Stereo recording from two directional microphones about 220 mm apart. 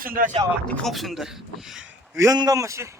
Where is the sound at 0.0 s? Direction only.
40° right (ahead or behind).